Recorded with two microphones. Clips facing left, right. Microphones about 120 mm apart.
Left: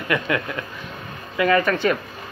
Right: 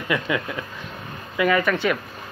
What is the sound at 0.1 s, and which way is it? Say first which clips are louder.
Speech: left 1 dB; 10° right (ahead or behind).